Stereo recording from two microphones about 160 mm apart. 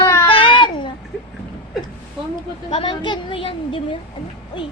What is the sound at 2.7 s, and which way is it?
A woman's voice, 30° left (ahead or behind).